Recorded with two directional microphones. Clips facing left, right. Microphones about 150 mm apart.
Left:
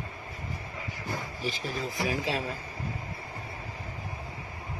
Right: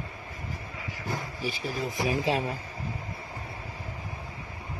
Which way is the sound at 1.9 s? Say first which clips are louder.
Right 4 dB; 25° right (ahead or behind).